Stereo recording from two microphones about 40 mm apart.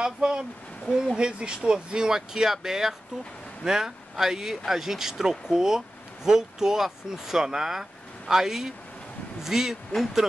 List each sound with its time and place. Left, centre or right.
0.0 s speech: centre
0.8 s speech: centre
1.1 s speech: right